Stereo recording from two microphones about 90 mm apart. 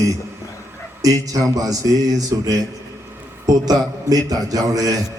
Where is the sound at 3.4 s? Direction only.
45° right (ahead or behind).